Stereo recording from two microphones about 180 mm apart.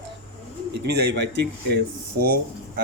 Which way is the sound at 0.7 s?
70° right (ahead or behind).